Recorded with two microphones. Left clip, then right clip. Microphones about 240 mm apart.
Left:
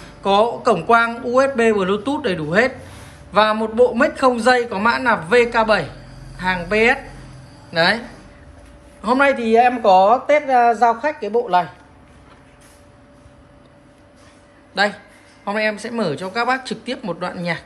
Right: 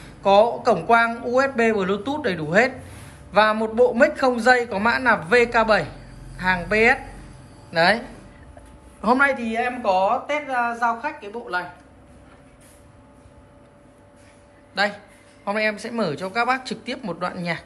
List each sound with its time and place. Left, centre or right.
0.2 s a man's voice: centre
9.2 s speech: centre
14.7 s a man's voice: centre